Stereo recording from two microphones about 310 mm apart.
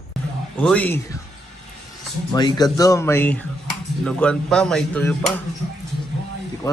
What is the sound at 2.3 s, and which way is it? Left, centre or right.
A man's voice, centre.